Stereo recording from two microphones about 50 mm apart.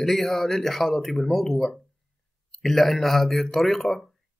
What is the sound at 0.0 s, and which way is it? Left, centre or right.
Speech, centre.